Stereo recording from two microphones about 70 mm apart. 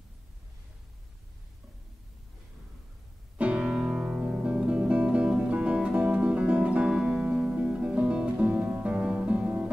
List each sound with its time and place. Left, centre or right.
3.3 s music: centre
6.9 s music: centre